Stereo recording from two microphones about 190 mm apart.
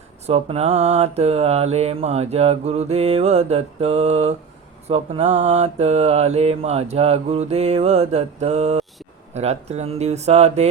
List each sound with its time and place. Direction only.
0.3 s mantra: 35° right (ahead or behind)